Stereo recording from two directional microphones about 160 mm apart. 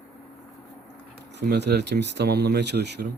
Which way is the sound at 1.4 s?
90° right.